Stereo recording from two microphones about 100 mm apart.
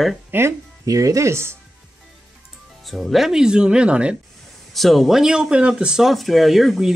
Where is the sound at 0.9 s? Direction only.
35° right (ahead or behind).